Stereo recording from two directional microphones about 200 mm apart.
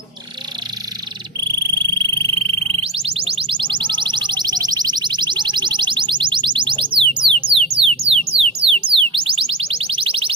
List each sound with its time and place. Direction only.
1.4 s a sound: 20° right (ahead or behind)
7.8 s music: 30° right (ahead or behind)
8.4 s alarm: 25° right (ahead or behind)